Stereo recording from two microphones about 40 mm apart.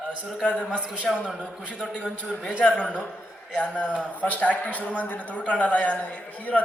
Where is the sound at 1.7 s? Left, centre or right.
Left.